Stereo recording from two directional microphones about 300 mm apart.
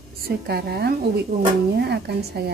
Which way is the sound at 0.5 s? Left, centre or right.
Right.